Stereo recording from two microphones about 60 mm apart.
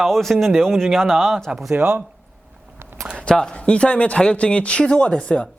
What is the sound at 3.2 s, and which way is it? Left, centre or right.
A woman's voice, centre.